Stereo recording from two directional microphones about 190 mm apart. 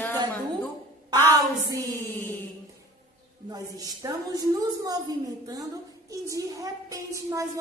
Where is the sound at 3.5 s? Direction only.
20° right (ahead or behind).